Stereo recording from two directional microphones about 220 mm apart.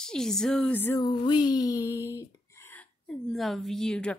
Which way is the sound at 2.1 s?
10° left (ahead or behind).